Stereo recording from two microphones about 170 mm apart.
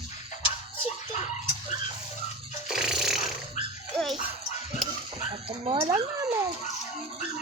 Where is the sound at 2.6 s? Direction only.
5° right (ahead or behind).